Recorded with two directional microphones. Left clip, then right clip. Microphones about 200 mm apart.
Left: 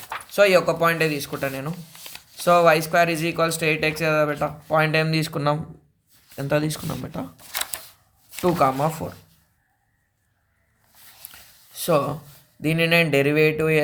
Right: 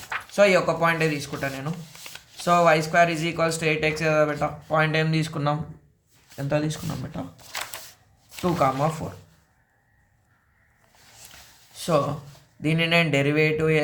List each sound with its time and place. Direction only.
0.3 s speech: 40° left (ahead or behind)
8.4 s speech: 40° left (ahead or behind)
11.8 s speech: 40° left (ahead or behind)